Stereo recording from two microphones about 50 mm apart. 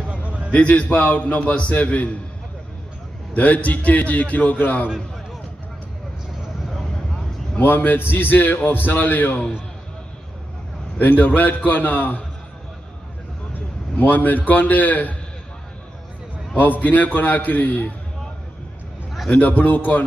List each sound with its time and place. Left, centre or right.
0.1 s a sound: right
0.5 s a man's voice: left
3.3 s a man's voice: left
7.5 s a man's voice: left
11.0 s a man's voice: left
13.9 s a man's voice: left
16.5 s a man's voice: left
19.3 s a man's voice: left